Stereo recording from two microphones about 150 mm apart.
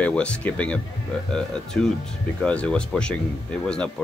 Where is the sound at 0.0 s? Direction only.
5° left (ahead or behind).